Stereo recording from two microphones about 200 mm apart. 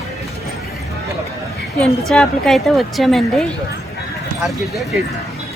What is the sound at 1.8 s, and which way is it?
A woman's voice, 5° left (ahead or behind).